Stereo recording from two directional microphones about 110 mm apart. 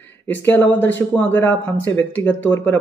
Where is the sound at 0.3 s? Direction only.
15° left (ahead or behind).